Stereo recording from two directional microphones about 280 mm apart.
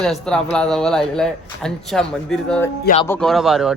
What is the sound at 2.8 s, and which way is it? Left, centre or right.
Speech, left.